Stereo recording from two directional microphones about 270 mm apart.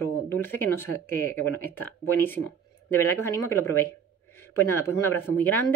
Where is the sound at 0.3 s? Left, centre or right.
Centre.